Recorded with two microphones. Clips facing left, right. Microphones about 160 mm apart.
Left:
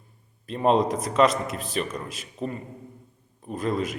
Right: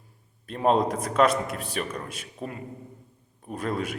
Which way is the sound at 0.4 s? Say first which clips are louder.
Left 1 dB; centre (ahead or behind).